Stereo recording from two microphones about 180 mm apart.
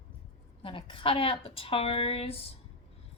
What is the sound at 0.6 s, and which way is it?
Speech, 30° left (ahead or behind).